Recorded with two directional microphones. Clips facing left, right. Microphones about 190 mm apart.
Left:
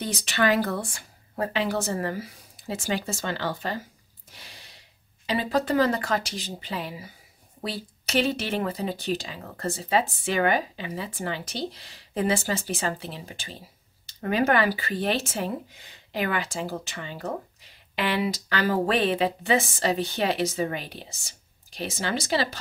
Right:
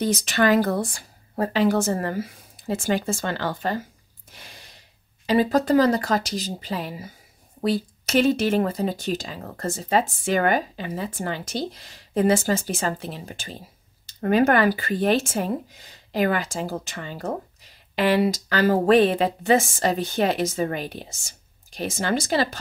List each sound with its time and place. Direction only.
0.0 s speech: 45° right (ahead or behind)
5.2 s speech: 45° right (ahead or behind)